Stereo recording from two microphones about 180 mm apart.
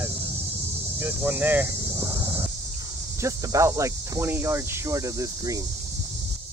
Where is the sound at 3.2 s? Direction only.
15° right (ahead or behind).